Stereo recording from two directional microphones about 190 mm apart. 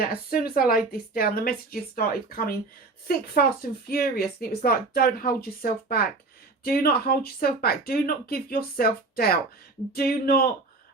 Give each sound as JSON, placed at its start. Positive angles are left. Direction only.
{"t": 0.0, "sound": "a woman's voice", "side_deg": 50}